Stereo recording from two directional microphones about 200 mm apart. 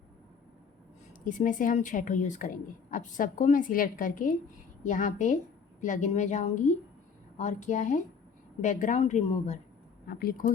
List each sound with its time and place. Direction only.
1.2 s speech: 40° left (ahead or behind)
10.1 s speech: 45° left (ahead or behind)